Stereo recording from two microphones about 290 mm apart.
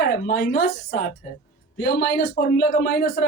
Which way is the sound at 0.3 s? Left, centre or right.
Left.